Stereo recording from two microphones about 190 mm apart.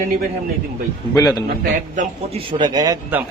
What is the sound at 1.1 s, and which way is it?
Speech, 20° left (ahead or behind).